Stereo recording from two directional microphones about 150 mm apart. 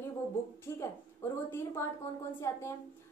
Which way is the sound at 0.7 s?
20° left (ahead or behind).